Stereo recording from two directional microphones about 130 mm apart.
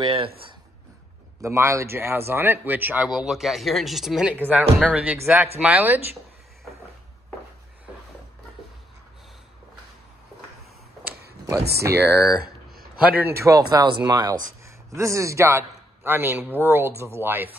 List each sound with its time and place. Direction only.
0.0 s speech: 40° right (ahead or behind)
1.4 s speech: 20° right (ahead or behind)
11.4 s speech: 25° right (ahead or behind)
13.2 s a man's voice: 20° right (ahead or behind)